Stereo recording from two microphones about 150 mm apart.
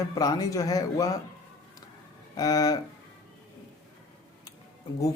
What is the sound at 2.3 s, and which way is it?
Speech, 25° left (ahead or behind).